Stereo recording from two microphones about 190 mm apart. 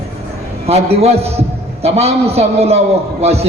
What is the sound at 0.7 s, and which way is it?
A man's voice, 35° right (ahead or behind).